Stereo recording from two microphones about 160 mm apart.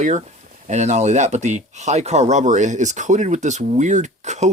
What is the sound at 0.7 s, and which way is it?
Speech, 45° right (ahead or behind).